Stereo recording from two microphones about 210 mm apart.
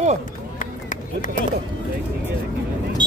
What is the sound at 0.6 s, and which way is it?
Run, 40° left (ahead or behind).